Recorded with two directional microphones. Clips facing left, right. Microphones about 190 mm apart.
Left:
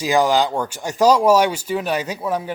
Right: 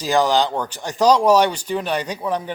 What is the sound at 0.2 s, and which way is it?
Speech, 15° left (ahead or behind).